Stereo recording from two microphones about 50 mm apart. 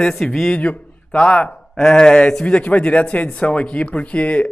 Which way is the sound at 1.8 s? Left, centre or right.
Centre.